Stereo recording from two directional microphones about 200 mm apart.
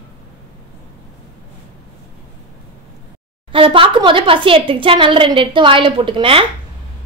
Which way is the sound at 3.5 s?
25° right (ahead or behind).